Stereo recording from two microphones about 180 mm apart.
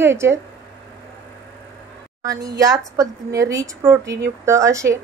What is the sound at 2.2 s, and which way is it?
A woman's voice, 20° right (ahead or behind).